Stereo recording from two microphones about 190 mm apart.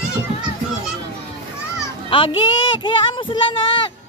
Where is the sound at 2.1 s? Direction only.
25° left (ahead or behind).